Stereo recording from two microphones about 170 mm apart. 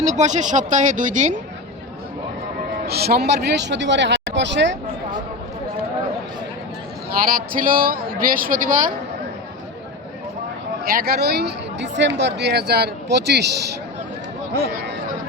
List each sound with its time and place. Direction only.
0.0 s speech: 45° right (ahead or behind)
2.8 s a man's voice: 70° right (ahead or behind); by 4.8 s 90° right
7.3 s speech: 55° right (ahead or behind)
10.8 s speech: 60° right (ahead or behind)